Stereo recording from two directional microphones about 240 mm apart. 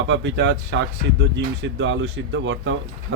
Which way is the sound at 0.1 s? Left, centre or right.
Right.